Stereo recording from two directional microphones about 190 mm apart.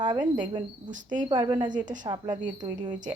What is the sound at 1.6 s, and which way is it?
Speech, 40° right (ahead or behind).